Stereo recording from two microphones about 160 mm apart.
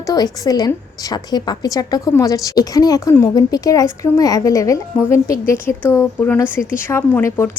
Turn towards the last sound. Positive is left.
turn(degrees=15)  # may be behind; listen again after turning